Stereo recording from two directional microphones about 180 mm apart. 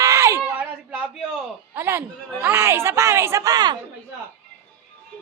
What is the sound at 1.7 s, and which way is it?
A woman's voice, 10° right (ahead or behind).